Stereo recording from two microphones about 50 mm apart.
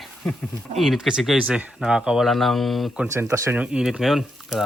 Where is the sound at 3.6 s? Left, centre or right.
Centre.